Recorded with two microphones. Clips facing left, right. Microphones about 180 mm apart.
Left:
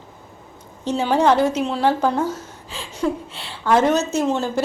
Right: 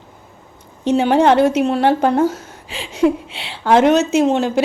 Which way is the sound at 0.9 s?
65° right (ahead or behind).